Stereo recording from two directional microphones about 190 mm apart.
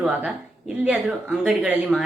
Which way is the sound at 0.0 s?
5° right (ahead or behind).